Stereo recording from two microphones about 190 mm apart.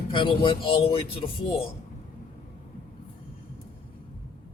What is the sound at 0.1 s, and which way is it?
Speech, 25° left (ahead or behind).